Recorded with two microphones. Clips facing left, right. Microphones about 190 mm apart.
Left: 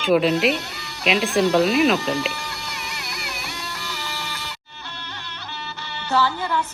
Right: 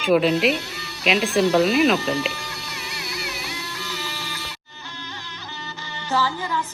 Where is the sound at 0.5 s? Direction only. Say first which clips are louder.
Even; 55° left (ahead or behind).